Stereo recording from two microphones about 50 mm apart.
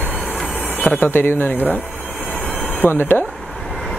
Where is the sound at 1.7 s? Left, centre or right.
Left.